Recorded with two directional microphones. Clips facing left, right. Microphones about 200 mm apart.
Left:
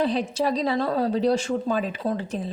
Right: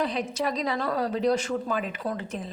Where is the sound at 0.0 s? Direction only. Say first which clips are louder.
Left 4 dB; 30° left (ahead or behind).